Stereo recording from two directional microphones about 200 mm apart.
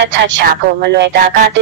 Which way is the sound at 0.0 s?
65° right (ahead or behind).